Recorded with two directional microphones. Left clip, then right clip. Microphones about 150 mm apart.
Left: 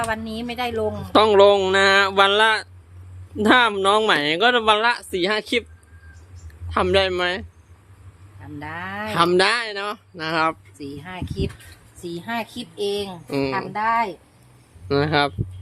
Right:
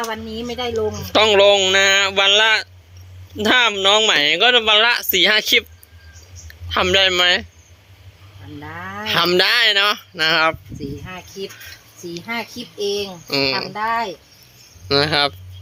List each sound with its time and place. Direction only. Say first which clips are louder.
0.0 s speech: even; 5° left (ahead or behind)
0.8 s speech: right 1 dB; 20° left (ahead or behind)
4.8 s speech: right 6 dB; 5° left (ahead or behind)
6.7 s a child's voice: right 4 dB; 5° left (ahead or behind)
8.5 s speech: even; 15° left (ahead or behind)
12.2 s a child's voice: right 2 dB; 10° left (ahead or behind)